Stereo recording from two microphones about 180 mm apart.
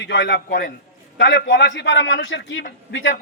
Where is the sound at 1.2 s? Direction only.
85° left.